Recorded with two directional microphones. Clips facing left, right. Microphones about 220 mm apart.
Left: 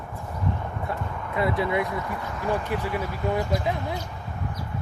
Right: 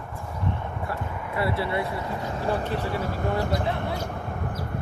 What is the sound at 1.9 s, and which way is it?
Speech, 25° right (ahead or behind).